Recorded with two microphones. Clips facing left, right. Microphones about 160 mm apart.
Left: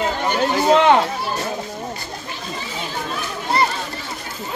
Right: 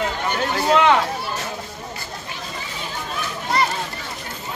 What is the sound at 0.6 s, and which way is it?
Speech, 25° left (ahead or behind).